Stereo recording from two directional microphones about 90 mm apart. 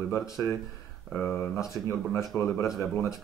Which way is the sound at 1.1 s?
20° left (ahead or behind).